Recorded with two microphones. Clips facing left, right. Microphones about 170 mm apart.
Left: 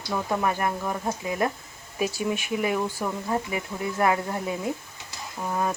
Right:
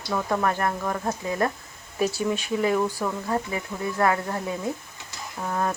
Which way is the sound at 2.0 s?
15° left (ahead or behind).